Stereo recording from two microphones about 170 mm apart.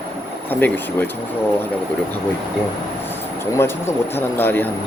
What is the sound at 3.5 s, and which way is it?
Speech, 15° left (ahead or behind).